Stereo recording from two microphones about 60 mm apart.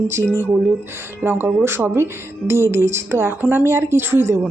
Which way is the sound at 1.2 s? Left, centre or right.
Right.